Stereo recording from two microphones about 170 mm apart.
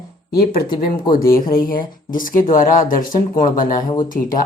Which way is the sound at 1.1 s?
55° left (ahead or behind).